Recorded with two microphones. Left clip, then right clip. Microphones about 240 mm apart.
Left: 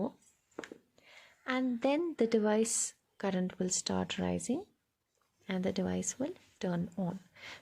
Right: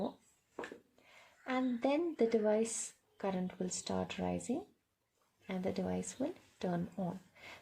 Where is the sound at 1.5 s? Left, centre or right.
Left.